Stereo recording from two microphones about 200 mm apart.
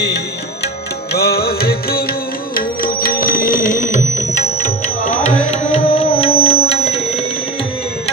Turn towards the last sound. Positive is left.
turn(degrees=30)  # may be behind; listen again after turning